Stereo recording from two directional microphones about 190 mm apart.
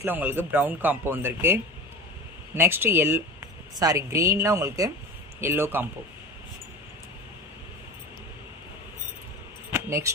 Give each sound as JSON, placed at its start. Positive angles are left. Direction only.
{"t": 0.0, "sound": "speech", "side_deg": -10}
{"t": 9.7, "sound": "keys jangling", "side_deg": -15}